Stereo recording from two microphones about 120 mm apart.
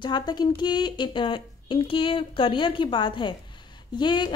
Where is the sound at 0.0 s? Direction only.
35° left (ahead or behind).